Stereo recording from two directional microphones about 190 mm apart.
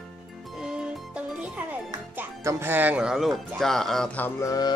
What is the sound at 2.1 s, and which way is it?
Speech, 10° right (ahead or behind).